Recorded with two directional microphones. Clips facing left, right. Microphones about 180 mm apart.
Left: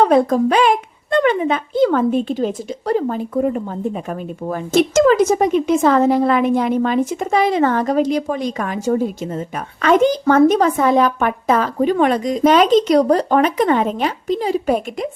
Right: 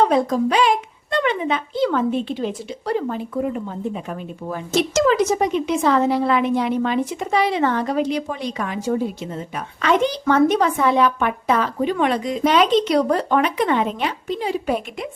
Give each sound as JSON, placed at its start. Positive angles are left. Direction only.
{"t": 0.0, "sound": "speech", "side_deg": 55}